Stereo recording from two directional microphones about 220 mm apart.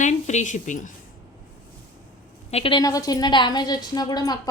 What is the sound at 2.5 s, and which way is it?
A woman's voice, 25° left (ahead or behind).